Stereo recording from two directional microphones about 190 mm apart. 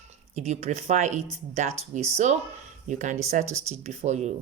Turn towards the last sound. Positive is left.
turn(degrees=-35)  # may be behind; listen again after turning